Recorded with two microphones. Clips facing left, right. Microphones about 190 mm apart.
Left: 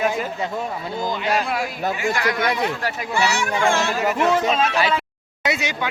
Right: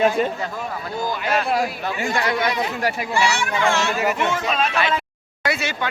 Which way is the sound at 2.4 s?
55° left (ahead or behind).